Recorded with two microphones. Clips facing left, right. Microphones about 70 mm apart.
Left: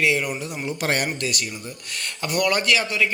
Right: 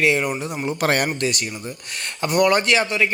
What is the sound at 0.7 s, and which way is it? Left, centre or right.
Speech, right.